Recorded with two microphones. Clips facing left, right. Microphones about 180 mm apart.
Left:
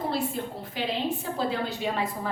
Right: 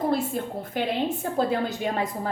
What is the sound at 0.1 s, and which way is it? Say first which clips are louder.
A woman's voice: right 4 dB; 50° right (ahead or behind).